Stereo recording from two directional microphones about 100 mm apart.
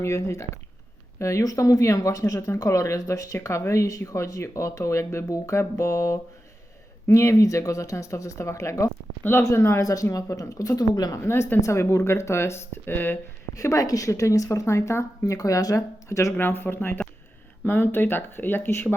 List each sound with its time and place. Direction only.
0.0 s speech: 30° left (ahead or behind)
11.2 s speech: 25° left (ahead or behind)
13.6 s speech: 30° left (ahead or behind)